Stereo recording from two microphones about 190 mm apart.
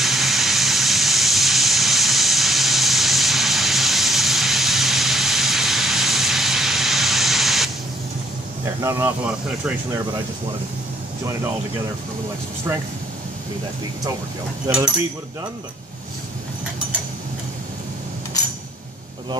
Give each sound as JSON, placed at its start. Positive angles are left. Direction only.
{"t": 0.0, "sound": "vehicle", "side_deg": 0}
{"t": 8.6, "sound": "speech", "side_deg": -10}
{"t": 14.7, "sound": "speech", "side_deg": -15}